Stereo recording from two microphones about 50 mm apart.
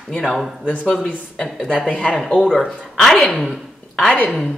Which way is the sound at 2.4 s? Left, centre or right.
Centre.